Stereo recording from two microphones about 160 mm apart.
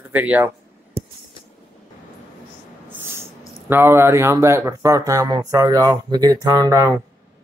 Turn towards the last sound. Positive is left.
turn(degrees=-20)  # may be behind; listen again after turning